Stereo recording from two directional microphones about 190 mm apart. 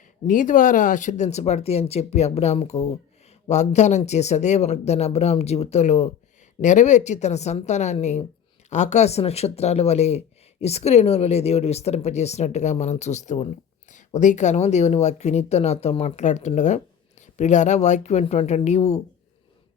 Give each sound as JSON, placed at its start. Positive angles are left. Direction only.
{"t": 0.3, "sound": "speech", "side_deg": 45}